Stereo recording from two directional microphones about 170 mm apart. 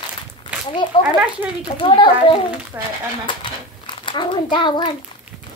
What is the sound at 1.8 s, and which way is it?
Speech, 30° left (ahead or behind).